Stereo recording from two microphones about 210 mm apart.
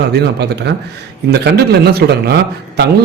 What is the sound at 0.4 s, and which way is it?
A man's voice, 50° right (ahead or behind).